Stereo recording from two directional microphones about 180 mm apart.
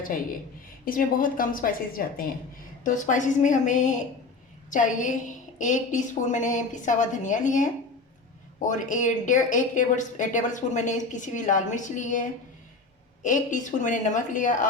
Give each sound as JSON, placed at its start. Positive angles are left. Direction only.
{"t": 0.9, "sound": "speech", "side_deg": 50}